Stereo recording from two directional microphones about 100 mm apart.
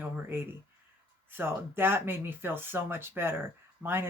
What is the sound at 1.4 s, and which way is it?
Speech, 20° right (ahead or behind).